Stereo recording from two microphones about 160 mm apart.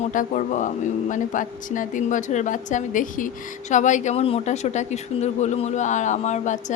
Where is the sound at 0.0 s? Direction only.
55° left (ahead or behind).